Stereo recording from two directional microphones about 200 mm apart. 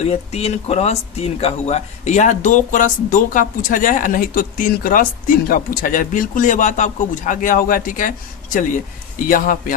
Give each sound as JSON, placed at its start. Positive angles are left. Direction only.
{"t": 0.1, "sound": "speech", "side_deg": 30}